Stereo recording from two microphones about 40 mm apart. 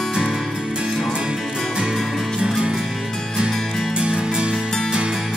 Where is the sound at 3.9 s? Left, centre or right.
Right.